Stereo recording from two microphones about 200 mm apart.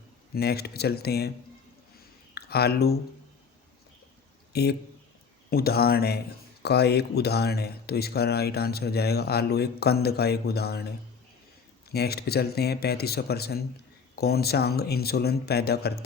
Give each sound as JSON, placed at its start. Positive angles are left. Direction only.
{"t": 0.3, "sound": "speech", "side_deg": 50}
{"t": 2.3, "sound": "speech", "side_deg": 55}
{"t": 4.5, "sound": "speech", "side_deg": 55}
{"t": 11.9, "sound": "speech", "side_deg": 55}